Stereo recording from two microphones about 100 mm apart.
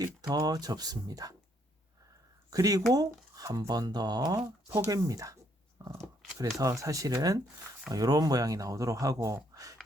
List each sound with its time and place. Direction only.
0.0 s speech: 40° right (ahead or behind)
2.5 s speech: 35° right (ahead or behind)